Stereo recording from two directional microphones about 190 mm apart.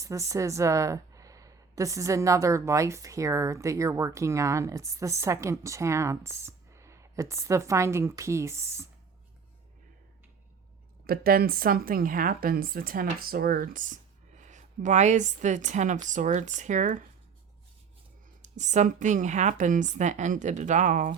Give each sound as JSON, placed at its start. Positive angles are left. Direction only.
{"t": 0.0, "sound": "a woman's voice", "side_deg": -15}
{"t": 11.0, "sound": "a woman's voice", "side_deg": -50}
{"t": 18.4, "sound": "a woman's voice", "side_deg": -40}